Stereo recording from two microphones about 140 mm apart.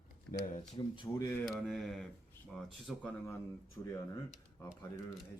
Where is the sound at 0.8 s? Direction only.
35° left (ahead or behind).